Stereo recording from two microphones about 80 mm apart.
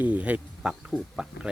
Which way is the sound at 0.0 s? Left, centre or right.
Centre.